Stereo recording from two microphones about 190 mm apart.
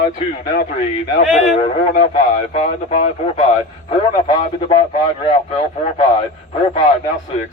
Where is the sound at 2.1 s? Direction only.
35° left (ahead or behind).